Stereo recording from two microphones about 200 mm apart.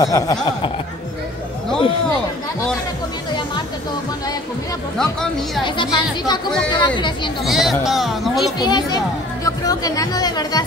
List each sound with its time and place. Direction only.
0.0 s speech: 20° left (ahead or behind)
5.8 s speech: 20° left (ahead or behind)
7.4 s speech: centre (ahead or behind)
8.5 s speech: 20° left (ahead or behind)